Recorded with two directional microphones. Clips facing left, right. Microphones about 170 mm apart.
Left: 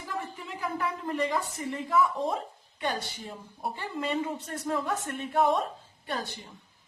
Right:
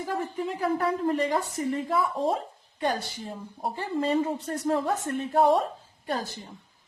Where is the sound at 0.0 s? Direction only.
35° right (ahead or behind).